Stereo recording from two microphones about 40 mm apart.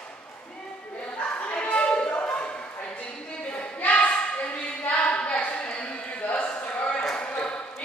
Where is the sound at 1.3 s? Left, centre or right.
Left.